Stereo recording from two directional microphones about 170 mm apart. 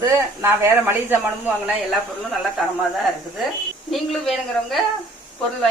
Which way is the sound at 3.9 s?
Centre (ahead or behind).